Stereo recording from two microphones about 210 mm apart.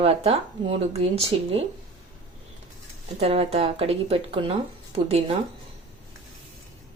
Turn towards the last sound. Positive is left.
turn(degrees=-25)  # may be behind; listen again after turning